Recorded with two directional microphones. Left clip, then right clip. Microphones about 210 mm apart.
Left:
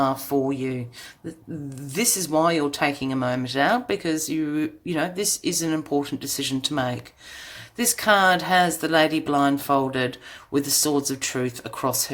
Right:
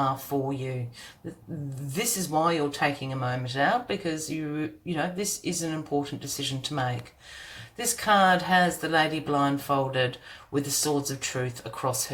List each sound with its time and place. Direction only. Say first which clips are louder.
0.0 s speech: left 5 dB; 45° left (ahead or behind)
2.0 s speech: left 5 dB; 45° left (ahead or behind)